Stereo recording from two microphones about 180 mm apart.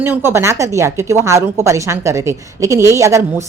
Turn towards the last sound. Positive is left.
turn(degrees=-15)  # may be behind; listen again after turning